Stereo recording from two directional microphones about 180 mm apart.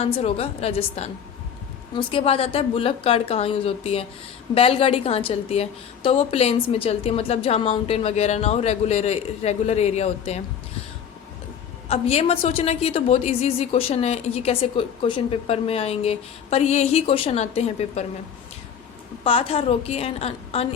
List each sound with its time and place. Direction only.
0.0 s a woman's voice: 35° left (ahead or behind)
11.9 s a woman's voice: 35° left (ahead or behind)
19.2 s a woman's voice: 30° left (ahead or behind)